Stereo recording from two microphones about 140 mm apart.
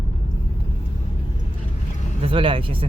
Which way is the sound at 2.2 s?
40° right (ahead or behind).